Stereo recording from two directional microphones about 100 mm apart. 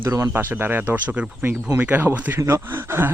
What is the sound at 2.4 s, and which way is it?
Speech, 30° right (ahead or behind).